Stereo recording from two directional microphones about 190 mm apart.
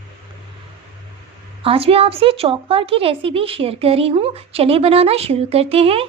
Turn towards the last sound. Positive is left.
turn(degrees=-30)  # may be behind; listen again after turning